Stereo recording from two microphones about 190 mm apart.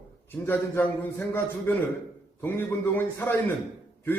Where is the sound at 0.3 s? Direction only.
10° left (ahead or behind).